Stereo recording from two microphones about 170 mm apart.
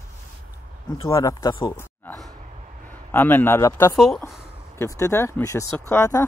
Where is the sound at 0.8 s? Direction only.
20° left (ahead or behind).